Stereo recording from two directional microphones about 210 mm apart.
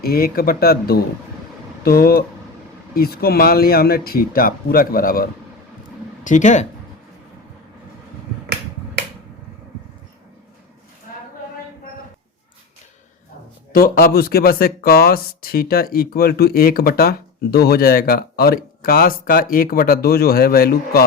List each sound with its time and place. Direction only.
0.0 s speech: 45° left (ahead or behind)
13.7 s speech: 45° left (ahead or behind)